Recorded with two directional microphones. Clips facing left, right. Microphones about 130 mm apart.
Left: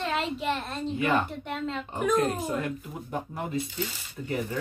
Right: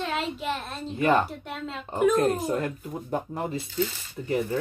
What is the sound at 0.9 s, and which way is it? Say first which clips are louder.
Speech: right 4 dB; 40° right (ahead or behind).